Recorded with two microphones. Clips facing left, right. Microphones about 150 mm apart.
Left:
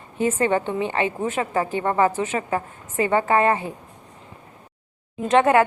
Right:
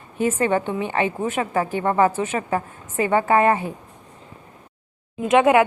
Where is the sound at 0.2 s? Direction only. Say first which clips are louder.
Even; 25° left (ahead or behind).